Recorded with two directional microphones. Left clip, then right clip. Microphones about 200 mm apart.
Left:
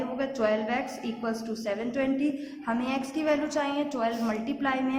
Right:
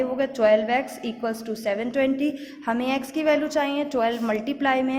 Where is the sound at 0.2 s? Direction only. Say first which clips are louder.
Right 8 dB; 35° right (ahead or behind).